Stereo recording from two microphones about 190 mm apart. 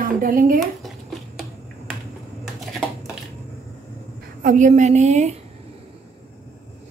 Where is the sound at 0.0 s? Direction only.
45° right (ahead or behind).